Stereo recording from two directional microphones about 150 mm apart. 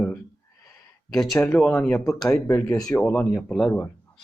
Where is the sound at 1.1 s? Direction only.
Centre (ahead or behind).